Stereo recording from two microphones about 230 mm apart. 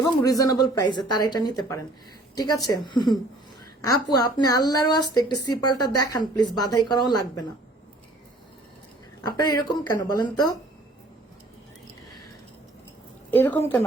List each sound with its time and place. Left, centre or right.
0.0 s speech: centre
9.2 s speech: centre
13.3 s speech: centre